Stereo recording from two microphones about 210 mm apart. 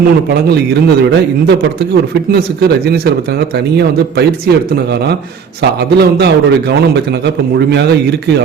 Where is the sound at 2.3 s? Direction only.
50° right (ahead or behind).